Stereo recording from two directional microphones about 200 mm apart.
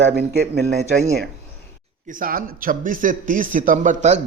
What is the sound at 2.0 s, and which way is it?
A man's voice, 45° right (ahead or behind).